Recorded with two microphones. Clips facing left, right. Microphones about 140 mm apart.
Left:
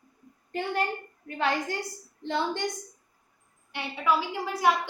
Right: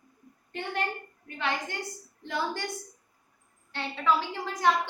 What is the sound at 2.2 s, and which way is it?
Speech, 25° left (ahead or behind).